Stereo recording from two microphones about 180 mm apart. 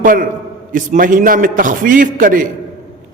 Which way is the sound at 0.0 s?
50° right (ahead or behind).